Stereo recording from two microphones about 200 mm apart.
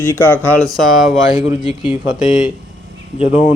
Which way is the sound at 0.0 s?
10° left (ahead or behind).